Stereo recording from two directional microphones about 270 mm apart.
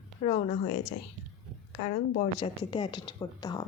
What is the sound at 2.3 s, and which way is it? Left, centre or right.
A woman's voice, centre.